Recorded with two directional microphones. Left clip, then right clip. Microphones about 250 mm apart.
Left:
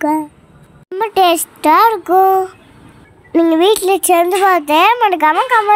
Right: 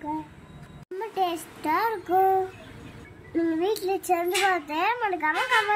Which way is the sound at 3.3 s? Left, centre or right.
Left.